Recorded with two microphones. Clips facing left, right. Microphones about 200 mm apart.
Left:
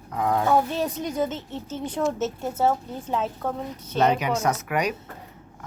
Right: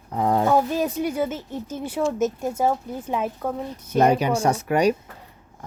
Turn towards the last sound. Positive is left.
turn(degrees=-30)  # may be behind; listen again after turning